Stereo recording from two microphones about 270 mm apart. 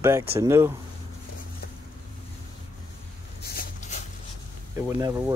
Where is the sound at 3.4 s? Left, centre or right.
Left.